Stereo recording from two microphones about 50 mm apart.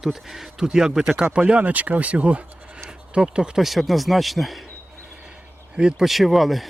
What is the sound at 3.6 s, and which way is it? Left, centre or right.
Speech, centre.